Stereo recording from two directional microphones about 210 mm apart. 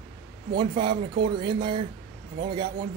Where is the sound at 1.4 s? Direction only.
20° right (ahead or behind).